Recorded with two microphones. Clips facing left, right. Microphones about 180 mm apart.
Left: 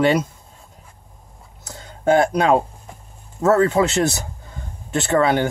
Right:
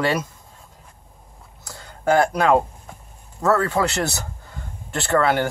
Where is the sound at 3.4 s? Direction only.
20° left (ahead or behind).